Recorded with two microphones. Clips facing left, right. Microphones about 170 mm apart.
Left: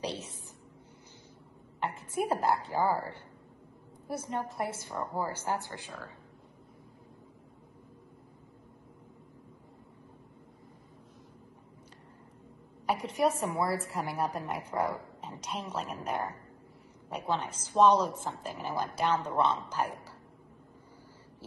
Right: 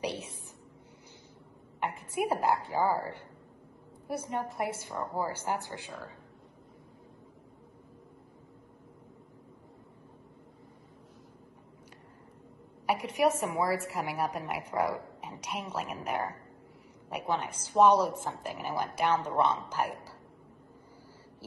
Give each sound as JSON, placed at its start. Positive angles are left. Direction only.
{"t": 0.0, "sound": "a woman's voice", "side_deg": -10}
{"t": 1.8, "sound": "a woman's voice", "side_deg": -15}
{"t": 12.8, "sound": "a woman's voice", "side_deg": -10}